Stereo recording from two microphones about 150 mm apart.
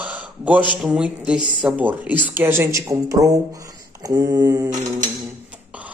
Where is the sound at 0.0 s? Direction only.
10° right (ahead or behind).